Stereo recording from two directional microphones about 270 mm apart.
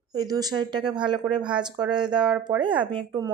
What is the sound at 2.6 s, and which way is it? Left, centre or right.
Speech, centre.